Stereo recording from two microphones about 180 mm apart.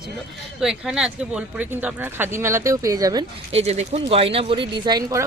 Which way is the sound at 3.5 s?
35° right (ahead or behind).